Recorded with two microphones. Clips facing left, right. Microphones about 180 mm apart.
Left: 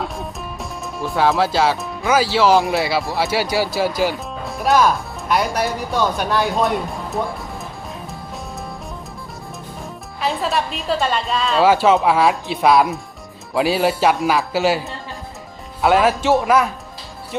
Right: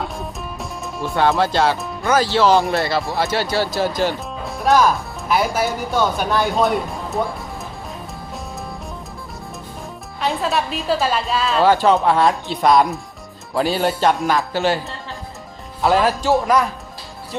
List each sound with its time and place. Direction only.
0.0 s speech: centre (ahead or behind)
10.2 s a woman's voice: centre (ahead or behind)